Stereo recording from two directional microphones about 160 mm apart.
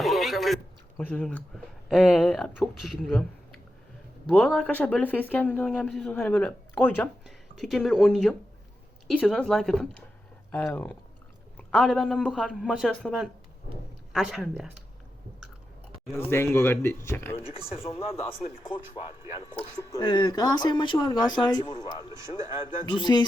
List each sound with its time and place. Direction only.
0.0 s speech: centre (ahead or behind)
4.3 s a man's voice: 5° left (ahead or behind)
10.5 s a man's voice: 10° left (ahead or behind)
16.3 s speech: 15° left (ahead or behind)
17.3 s speech: 35° left (ahead or behind)
20.0 s speech: 30° left (ahead or behind)